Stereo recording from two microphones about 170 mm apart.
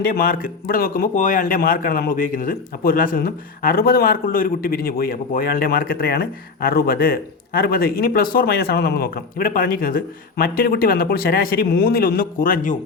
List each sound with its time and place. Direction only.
0.0 s speech: 55° left (ahead or behind)